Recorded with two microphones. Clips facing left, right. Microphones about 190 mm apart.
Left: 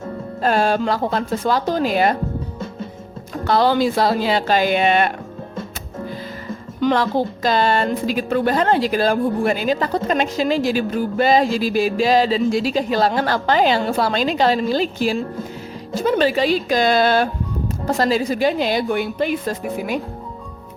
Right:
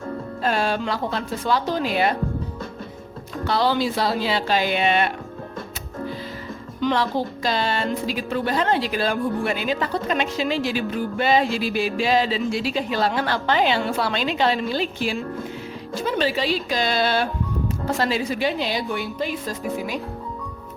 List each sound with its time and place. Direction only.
0.4 s speech: 45° left (ahead or behind)
3.4 s speech: 50° left (ahead or behind)
6.8 s a woman's voice: 45° left (ahead or behind)